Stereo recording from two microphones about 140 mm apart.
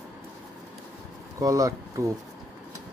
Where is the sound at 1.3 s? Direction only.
25° right (ahead or behind).